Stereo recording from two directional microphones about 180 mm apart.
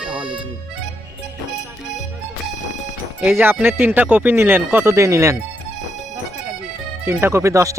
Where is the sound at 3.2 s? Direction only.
10° right (ahead or behind).